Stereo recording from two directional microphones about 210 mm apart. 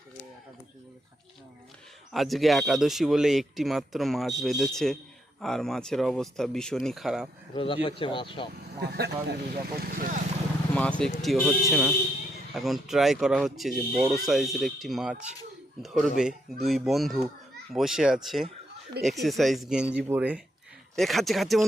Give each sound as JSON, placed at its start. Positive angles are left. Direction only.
{"t": 2.1, "sound": "speech", "side_deg": 0}
{"t": 7.5, "sound": "speech", "side_deg": 25}
{"t": 8.8, "sound": "speech", "side_deg": -50}
{"t": 10.8, "sound": "speech", "side_deg": 5}